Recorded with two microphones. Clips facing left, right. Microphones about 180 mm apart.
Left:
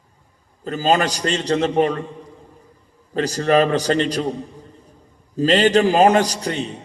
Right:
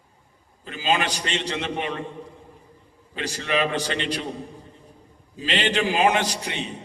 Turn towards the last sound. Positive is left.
turn(degrees=40)  # may be behind; listen again after turning